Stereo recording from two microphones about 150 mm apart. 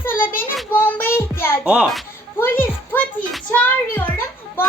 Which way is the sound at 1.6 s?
5° right (ahead or behind).